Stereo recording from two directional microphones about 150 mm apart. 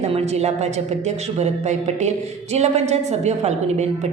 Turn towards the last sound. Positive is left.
turn(degrees=-50)  # may be behind; listen again after turning